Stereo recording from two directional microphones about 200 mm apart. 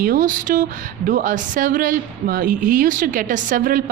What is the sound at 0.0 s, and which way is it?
A woman's voice, 45° right (ahead or behind).